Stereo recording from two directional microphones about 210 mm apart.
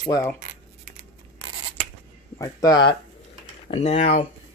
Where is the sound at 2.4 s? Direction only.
20° left (ahead or behind).